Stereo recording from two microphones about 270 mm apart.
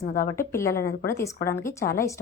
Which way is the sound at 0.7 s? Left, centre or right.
Left.